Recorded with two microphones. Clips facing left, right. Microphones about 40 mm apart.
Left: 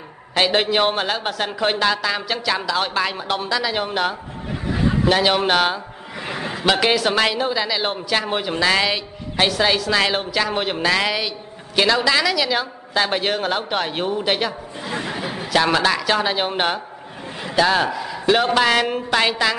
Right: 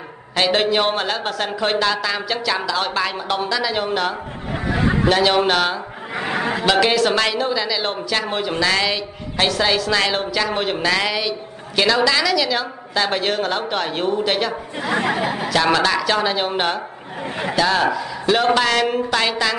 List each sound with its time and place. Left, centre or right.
0.3 s a man's voice: centre
4.6 s a sound: right
5.0 s a woman's voice: centre
6.1 s a sound: right
6.6 s a woman's voice: centre
14.8 s chatter: right
15.5 s a man's voice: centre
17.2 s a sound: right
17.6 s a woman's voice: centre